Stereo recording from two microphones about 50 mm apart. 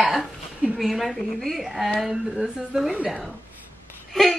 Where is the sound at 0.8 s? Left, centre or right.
Centre.